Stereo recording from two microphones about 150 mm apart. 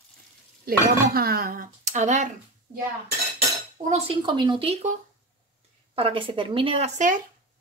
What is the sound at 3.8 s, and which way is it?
Speech, 45° right (ahead or behind).